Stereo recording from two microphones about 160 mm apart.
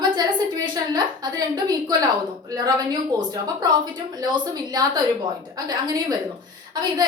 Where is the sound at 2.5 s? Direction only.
25° right (ahead or behind).